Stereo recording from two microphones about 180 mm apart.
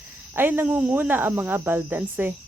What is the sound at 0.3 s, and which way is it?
Speech, 10° right (ahead or behind).